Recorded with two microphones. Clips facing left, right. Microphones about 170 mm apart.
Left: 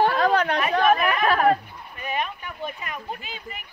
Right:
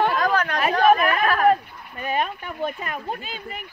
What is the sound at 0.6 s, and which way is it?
Chatter, 35° right (ahead or behind).